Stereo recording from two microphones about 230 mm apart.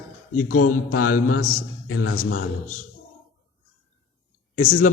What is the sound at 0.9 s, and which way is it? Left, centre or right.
A man's voice, left.